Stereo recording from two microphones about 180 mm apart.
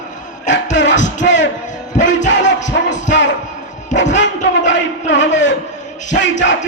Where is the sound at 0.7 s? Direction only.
80° left.